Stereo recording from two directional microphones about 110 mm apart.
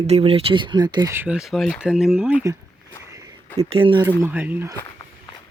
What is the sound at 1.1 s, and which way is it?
Speech, 15° right (ahead or behind).